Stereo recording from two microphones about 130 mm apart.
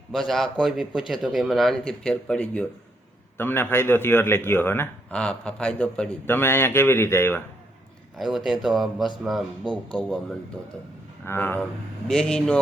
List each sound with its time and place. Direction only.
0.1 s a man's voice: centre (ahead or behind); by 7.4 s 20° left (ahead or behind)
8.4 s speech: centre (ahead or behind)
11.3 s a man's voice: 15° left (ahead or behind)
12.0 s speech: 5° left (ahead or behind)